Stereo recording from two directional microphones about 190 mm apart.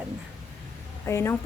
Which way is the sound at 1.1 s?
15° left (ahead or behind).